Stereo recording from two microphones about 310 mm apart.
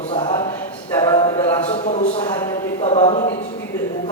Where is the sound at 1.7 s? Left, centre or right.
Left.